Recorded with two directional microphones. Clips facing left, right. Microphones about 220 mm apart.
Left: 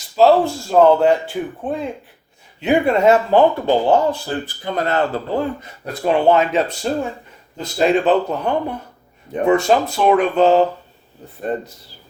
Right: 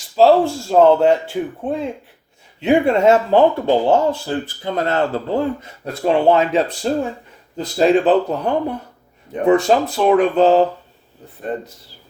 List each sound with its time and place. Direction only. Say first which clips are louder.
0.2 s speech: right 1 dB; 30° right (ahead or behind)
11.5 s speech: left 1 dB; 40° left (ahead or behind)